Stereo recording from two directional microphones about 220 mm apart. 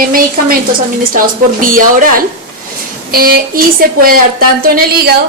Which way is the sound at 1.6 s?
40° right (ahead or behind).